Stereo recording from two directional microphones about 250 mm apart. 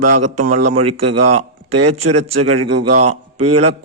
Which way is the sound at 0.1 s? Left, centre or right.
Right.